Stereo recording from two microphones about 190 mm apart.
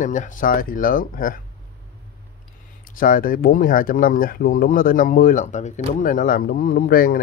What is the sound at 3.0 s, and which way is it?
Speech, 45° left (ahead or behind).